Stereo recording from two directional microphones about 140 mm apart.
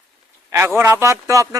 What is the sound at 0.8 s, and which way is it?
Speech, 20° right (ahead or behind).